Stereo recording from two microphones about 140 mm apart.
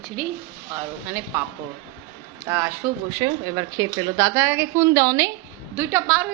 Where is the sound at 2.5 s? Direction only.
15° right (ahead or behind).